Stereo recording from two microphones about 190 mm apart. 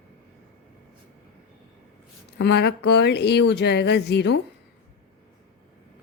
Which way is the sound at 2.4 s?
60° left (ahead or behind).